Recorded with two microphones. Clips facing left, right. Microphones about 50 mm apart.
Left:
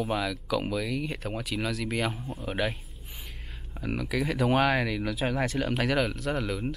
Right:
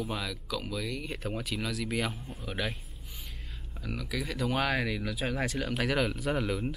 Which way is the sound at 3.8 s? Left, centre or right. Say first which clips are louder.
Left 6 dB; centre.